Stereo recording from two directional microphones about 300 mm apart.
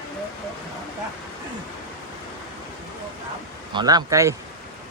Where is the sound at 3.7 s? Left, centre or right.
Centre.